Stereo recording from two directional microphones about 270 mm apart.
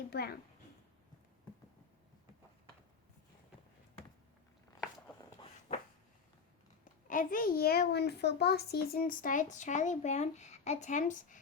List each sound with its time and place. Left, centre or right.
0.1 s a woman's voice: left
5.4 s a sound: left
7.1 s a child's voice: left